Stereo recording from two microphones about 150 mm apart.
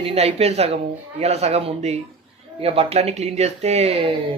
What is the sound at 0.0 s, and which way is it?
Speech, 40° right (ahead or behind).